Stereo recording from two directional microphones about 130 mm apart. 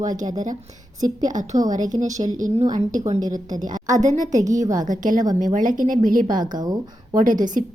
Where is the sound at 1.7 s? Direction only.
80° right.